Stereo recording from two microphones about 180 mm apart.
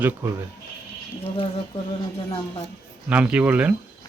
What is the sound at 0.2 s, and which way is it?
Speech, 10° right (ahead or behind).